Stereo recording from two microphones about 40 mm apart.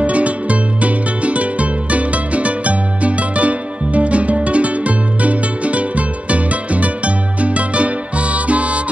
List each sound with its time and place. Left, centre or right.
0.0 s music: right